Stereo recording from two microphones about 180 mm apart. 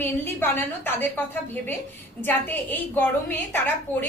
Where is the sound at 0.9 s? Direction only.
10° left (ahead or behind).